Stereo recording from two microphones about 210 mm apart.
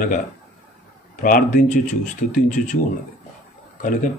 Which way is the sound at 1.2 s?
40° left (ahead or behind).